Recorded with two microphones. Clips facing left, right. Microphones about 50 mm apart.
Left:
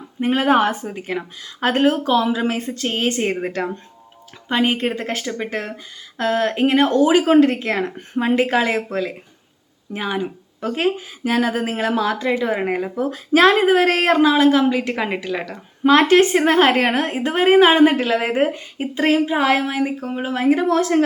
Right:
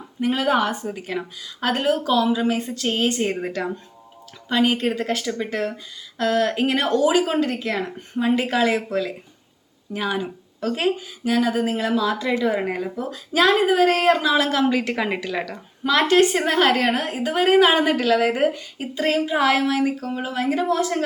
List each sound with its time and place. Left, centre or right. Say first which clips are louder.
0.2 s speech: left 4 dB; left
4.4 s speech: left 1 dB; left
6.8 s speech: left 3 dB; left
8.3 s speech: left 2 dB; left
11.2 s speech: left 1 dB; left
12.2 s speech: left 2 dB; left
14.3 s a woman's voice: left 4 dB; centre
15.8 s speech: left 4 dB; left
19.3 s speech: left 1 dB; left
20.7 s speech: left 3 dB; left